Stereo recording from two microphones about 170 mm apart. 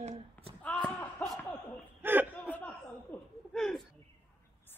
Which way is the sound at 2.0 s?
10° right (ahead or behind).